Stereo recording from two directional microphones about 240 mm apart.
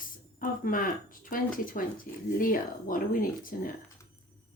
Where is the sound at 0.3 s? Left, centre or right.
Left.